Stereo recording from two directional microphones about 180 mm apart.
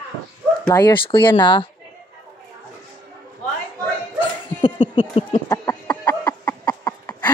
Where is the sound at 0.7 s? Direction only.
25° left (ahead or behind).